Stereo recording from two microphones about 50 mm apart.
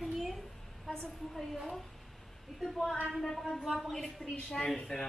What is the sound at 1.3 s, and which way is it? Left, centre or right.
Speech, centre.